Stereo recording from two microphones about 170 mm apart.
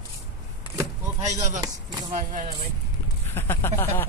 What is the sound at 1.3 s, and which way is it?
Speech, 45° right (ahead or behind).